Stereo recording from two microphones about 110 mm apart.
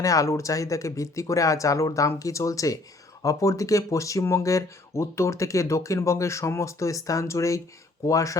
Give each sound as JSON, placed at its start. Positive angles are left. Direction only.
{"t": 0.0, "sound": "speech", "side_deg": 30}